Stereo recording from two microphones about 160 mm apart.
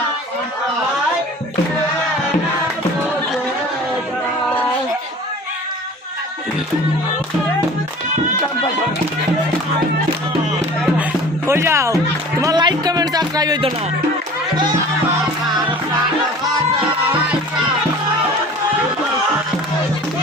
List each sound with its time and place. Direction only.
11.4 s speech: 15° right (ahead or behind)
12.4 s music: 25° right (ahead or behind)